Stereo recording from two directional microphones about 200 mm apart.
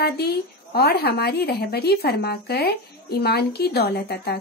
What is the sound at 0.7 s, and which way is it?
Speech, 55° left (ahead or behind).